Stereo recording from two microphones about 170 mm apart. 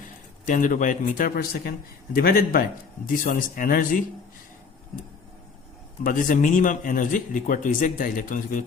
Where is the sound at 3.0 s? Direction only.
55° left (ahead or behind).